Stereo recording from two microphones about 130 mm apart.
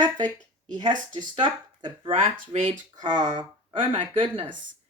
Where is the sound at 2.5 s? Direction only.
75° right (ahead or behind).